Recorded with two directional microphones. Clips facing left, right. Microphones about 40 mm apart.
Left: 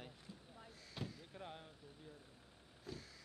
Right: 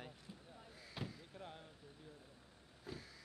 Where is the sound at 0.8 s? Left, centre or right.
Centre.